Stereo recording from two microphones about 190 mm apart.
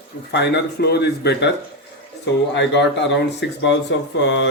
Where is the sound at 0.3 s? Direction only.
65° left (ahead or behind).